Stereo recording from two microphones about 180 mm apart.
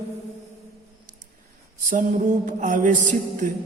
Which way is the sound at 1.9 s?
45° right (ahead or behind).